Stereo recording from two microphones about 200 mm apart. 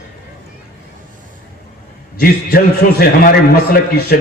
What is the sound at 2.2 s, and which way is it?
A man's voice, 50° left (ahead or behind).